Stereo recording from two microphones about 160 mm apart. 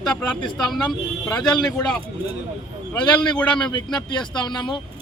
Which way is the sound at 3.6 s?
30° left (ahead or behind).